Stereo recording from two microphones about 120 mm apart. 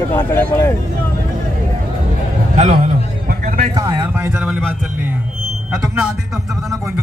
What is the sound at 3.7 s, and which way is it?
Speech, 30° right (ahead or behind).